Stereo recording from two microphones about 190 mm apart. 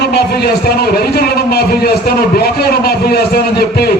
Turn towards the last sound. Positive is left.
turn(degrees=55)  # may be behind; listen again after turning